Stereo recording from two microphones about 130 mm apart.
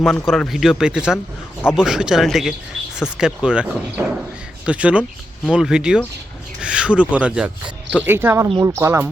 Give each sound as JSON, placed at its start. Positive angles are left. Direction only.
{"t": 0.0, "sound": "speech", "side_deg": 0}